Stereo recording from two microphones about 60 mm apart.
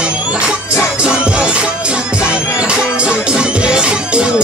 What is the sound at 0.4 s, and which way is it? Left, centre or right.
Music, centre.